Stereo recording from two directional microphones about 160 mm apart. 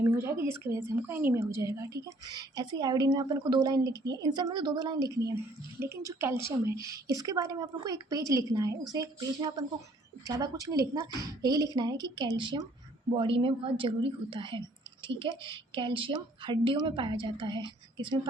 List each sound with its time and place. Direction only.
0.0 s a woman's voice: 15° right (ahead or behind)